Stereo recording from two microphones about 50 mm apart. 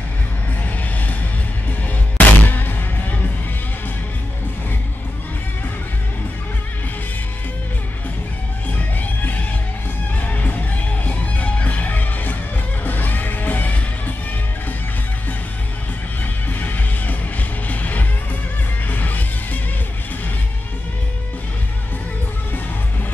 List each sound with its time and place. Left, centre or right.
2.1 s music: left
8.7 s music: left
16.4 s music: left